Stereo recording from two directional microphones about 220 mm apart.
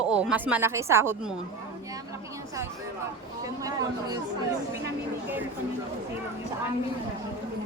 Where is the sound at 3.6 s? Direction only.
15° right (ahead or behind).